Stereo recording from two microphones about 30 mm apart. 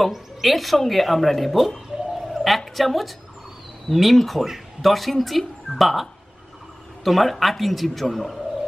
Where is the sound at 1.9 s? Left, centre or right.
Right.